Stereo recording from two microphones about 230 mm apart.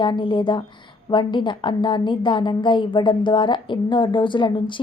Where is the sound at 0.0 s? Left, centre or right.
Left.